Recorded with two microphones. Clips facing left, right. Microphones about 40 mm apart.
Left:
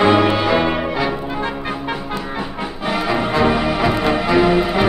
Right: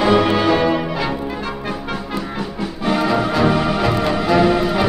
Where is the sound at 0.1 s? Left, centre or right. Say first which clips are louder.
Even; centre.